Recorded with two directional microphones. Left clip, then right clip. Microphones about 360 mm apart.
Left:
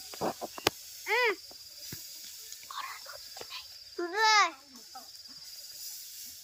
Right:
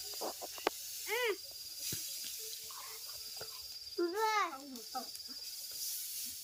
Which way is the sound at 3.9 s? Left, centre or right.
Left.